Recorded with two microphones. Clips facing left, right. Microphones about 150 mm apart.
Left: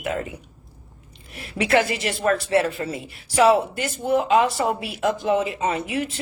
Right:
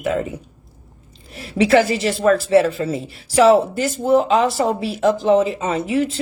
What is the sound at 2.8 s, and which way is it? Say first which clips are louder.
A woman's voice: right 6 dB; 30° right (ahead or behind).